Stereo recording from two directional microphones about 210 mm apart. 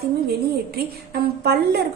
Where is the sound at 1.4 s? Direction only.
50° right (ahead or behind).